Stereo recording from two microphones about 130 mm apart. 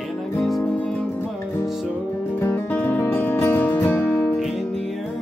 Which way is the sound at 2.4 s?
15° left (ahead or behind).